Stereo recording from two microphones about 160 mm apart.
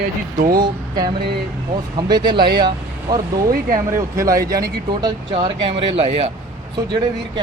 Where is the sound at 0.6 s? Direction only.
25° right (ahead or behind).